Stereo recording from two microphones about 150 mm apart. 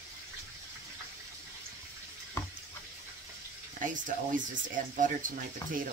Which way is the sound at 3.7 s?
60° right (ahead or behind).